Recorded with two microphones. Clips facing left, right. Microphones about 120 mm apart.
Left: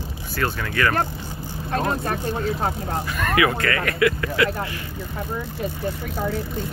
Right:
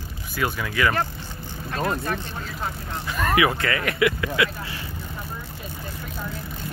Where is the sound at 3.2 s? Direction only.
20° right (ahead or behind).